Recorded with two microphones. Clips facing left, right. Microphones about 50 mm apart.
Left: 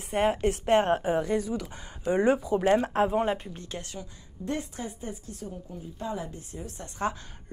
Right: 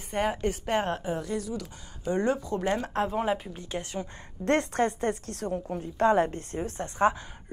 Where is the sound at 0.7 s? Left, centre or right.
Centre.